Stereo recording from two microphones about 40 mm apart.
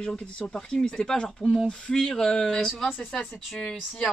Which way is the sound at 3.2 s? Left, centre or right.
Centre.